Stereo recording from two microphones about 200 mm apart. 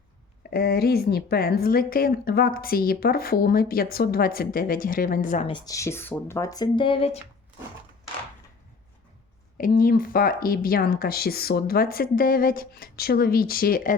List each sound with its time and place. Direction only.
0.5 s speech: 50° left (ahead or behind)
5.5 s speech: 20° left (ahead or behind)
9.6 s speech: 45° left (ahead or behind)